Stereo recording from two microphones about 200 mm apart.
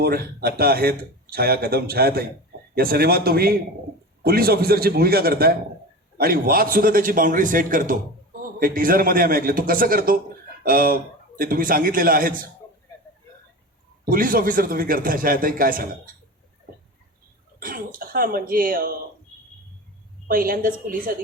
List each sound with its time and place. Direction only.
0.0 s speech: 50° right (ahead or behind)
14.0 s speech: 45° right (ahead or behind)
17.6 s speech: 45° right (ahead or behind)
20.2 s speech: 45° right (ahead or behind)